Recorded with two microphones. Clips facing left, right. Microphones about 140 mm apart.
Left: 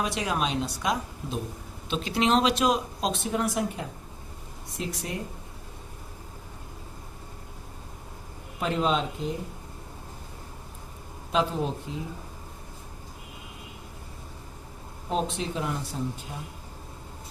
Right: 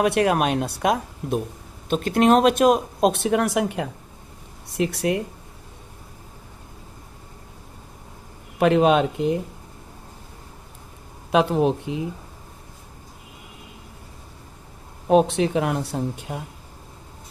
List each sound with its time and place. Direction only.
0.0 s speech: 60° right (ahead or behind)
8.5 s speech: 70° right (ahead or behind)
11.3 s speech: 65° right (ahead or behind)
15.1 s speech: 70° right (ahead or behind)